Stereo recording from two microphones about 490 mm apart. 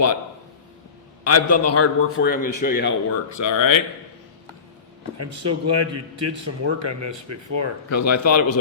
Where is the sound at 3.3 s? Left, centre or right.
Left.